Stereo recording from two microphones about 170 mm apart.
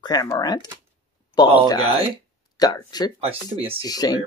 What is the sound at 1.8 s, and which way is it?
Speech, 35° right (ahead or behind).